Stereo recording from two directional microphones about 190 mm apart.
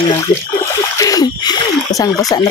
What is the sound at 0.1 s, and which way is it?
Speech, 15° left (ahead or behind).